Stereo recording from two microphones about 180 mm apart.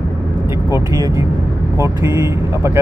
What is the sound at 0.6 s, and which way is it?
Speech, 15° right (ahead or behind).